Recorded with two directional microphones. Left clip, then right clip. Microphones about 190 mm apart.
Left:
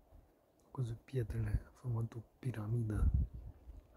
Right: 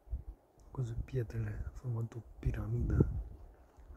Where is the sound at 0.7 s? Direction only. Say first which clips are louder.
Right 2 dB; centre (ahead or behind).